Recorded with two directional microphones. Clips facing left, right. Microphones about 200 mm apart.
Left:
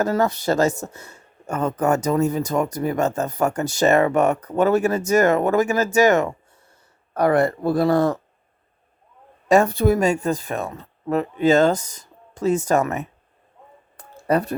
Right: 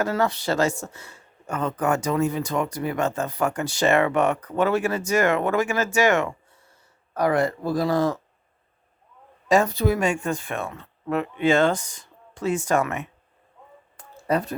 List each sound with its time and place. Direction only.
0.0 s speech: 40° left (ahead or behind)
0.7 s speech: 20° left (ahead or behind)
0.9 s speech: 45° left (ahead or behind)
7.1 s speech: 60° left (ahead or behind)
9.5 s speech: 55° left (ahead or behind); by 13.1 s 40° left (ahead or behind)
13.9 s a sound: 60° left (ahead or behind)